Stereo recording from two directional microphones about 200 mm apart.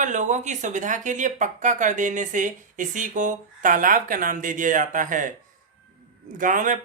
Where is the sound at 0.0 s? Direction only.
40° right (ahead or behind).